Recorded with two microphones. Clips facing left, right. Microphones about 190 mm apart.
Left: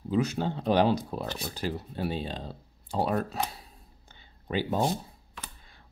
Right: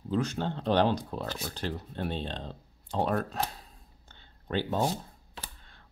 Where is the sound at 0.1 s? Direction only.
10° left (ahead or behind).